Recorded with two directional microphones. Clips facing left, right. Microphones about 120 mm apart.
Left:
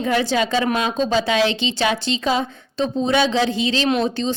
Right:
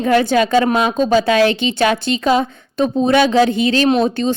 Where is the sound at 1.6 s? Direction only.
55° right (ahead or behind).